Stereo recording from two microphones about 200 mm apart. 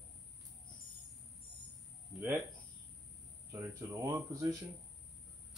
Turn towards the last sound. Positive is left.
turn(degrees=-15)  # may be behind; listen again after turning